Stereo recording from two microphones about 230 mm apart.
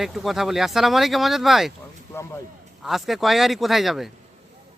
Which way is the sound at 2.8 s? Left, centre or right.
Centre.